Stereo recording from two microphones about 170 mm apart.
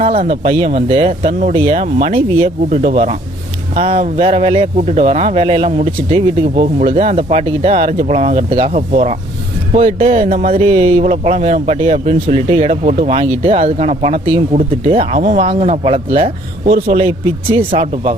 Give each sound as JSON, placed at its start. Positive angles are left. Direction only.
{"t": 0.0, "sound": "speech", "side_deg": -35}